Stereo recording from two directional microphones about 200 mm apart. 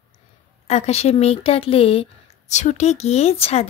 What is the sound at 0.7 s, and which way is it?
Speech, 30° left (ahead or behind).